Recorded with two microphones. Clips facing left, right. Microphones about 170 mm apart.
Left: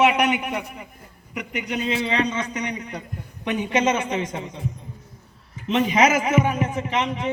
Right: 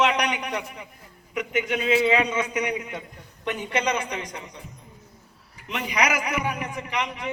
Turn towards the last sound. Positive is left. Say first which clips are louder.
# left 5 dB
turn(degrees=25)  # may be behind; listen again after turning